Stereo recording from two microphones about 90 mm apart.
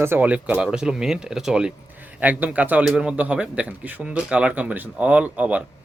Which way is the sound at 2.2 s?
20° right (ahead or behind).